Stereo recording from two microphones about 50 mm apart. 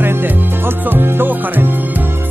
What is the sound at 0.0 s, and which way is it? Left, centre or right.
Music, right.